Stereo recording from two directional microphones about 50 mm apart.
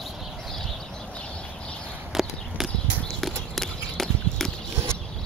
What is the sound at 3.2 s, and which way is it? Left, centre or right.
Clip-clop, centre.